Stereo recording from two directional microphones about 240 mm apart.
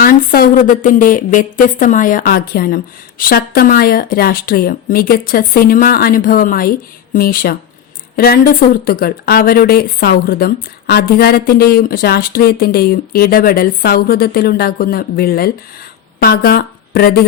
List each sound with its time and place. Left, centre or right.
0.0 s a woman's voice: left